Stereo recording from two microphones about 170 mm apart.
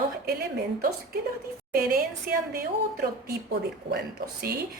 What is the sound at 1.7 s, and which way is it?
A woman's voice, 60° right (ahead or behind).